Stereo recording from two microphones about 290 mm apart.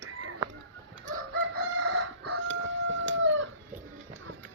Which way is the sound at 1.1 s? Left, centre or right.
Right.